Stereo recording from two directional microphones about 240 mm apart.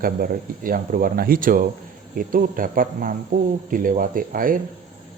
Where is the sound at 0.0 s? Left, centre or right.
Right.